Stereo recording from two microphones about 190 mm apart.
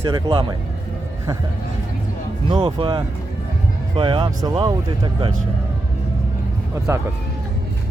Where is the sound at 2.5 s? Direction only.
25° right (ahead or behind).